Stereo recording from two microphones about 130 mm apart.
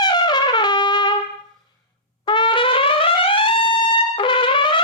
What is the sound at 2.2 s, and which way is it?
Trumpet, 35° left (ahead or behind).